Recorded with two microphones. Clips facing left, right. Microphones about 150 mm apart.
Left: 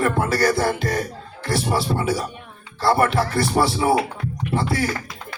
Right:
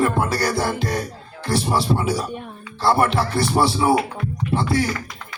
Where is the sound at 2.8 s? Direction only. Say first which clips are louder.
Even; 25° right (ahead or behind).